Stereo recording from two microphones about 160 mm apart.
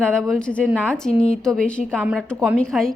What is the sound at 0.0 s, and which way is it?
A woman's voice, 5° left (ahead or behind).